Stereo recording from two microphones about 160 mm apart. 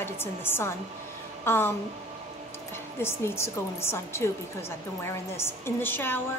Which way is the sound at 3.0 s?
15° left (ahead or behind).